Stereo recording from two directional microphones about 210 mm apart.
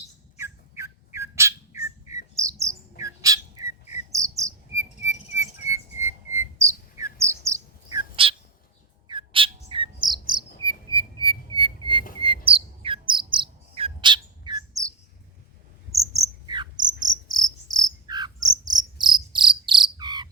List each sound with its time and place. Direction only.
0.3 s bird: 15° right (ahead or behind)
3.0 s whistling: 15° right (ahead or behind)
4.1 s cricket: 15° right (ahead or behind)
7.9 s bird: 20° right (ahead or behind)
16.5 s cricket: 20° right (ahead or behind)
17.2 s insect: 15° right (ahead or behind)